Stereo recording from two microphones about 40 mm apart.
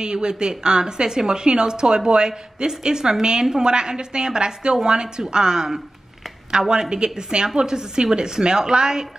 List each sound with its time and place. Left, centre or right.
0.0 s speech: right
6.7 s speech: centre